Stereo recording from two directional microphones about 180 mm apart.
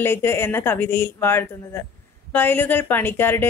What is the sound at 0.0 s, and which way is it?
A woman's voice, 10° left (ahead or behind).